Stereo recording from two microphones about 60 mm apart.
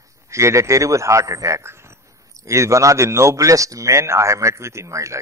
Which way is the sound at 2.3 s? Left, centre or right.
Right.